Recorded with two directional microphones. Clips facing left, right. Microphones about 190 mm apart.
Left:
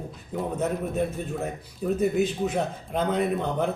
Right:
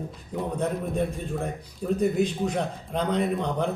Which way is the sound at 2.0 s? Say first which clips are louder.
Even; 5° left (ahead or behind).